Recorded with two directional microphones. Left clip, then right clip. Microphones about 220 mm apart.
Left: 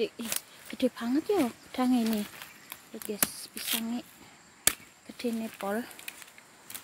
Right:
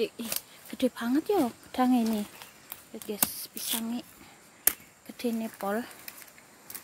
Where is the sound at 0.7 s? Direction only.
Centre (ahead or behind).